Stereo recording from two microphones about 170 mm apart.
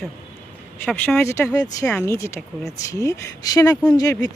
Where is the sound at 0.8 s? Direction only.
10° left (ahead or behind).